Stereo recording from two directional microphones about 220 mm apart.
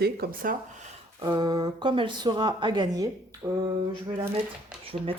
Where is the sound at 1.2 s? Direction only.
20° right (ahead or behind).